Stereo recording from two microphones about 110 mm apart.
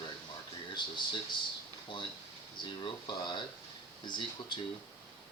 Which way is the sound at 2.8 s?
45° left (ahead or behind).